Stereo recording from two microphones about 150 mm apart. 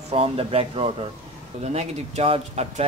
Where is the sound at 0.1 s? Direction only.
40° right (ahead or behind).